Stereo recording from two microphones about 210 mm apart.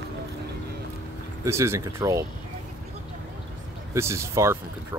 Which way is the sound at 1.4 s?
15° right (ahead or behind).